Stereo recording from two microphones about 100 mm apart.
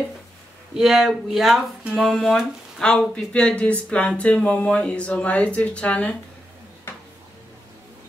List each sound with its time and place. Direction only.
0.7 s speech: 5° right (ahead or behind); by 6.1 s 10° left (ahead or behind)